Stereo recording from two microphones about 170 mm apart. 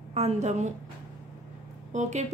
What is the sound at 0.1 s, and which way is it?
Speech, 40° right (ahead or behind).